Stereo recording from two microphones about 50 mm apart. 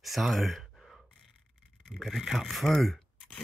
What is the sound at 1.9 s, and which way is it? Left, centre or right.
Speech, centre.